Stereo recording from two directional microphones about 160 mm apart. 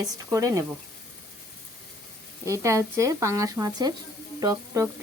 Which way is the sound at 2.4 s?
20° right (ahead or behind).